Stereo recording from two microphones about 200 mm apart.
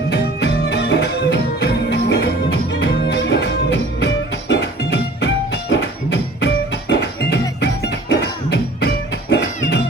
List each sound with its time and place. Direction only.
0.1 s music: 55° left (ahead or behind)